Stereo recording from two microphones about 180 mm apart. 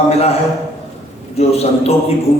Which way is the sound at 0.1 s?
35° left (ahead or behind).